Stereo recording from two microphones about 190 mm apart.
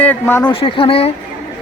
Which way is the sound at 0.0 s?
10° left (ahead or behind).